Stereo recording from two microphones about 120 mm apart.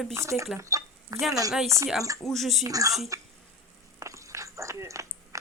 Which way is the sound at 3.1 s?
25° right (ahead or behind).